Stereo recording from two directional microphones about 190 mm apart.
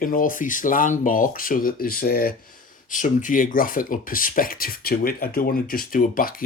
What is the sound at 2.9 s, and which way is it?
Speech, 40° left (ahead or behind).